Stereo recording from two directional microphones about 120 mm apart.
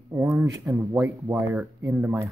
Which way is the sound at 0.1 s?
20° right (ahead or behind).